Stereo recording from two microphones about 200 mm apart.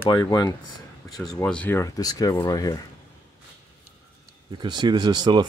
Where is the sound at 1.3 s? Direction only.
5° left (ahead or behind).